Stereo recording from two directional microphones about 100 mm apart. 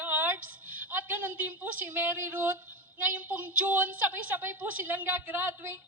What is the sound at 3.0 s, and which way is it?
A woman's voice, 15° right (ahead or behind).